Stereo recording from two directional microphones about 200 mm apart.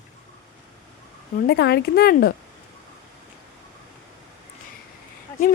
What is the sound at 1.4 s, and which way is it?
Speech, 55° left (ahead or behind).